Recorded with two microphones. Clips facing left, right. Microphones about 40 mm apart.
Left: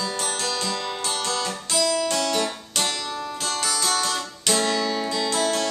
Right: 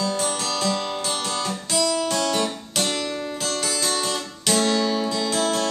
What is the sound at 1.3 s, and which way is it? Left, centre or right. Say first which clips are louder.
Guitar: right 1 dB; centre.